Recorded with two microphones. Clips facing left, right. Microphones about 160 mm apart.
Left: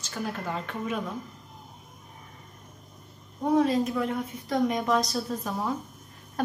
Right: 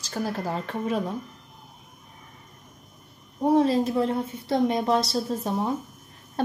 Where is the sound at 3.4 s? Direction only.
30° right (ahead or behind).